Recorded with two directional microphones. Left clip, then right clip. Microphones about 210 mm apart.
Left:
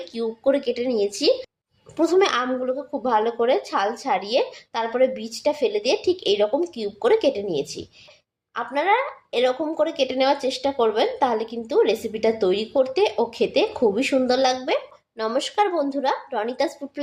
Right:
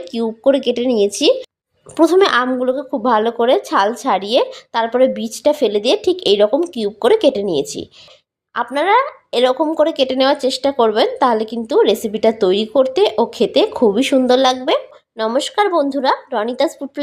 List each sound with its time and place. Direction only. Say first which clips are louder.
0.1 s speech: right 7 dB; 40° right (ahead or behind)